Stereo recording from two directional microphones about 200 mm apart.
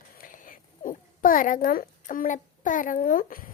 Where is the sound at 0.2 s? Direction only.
45° left (ahead or behind).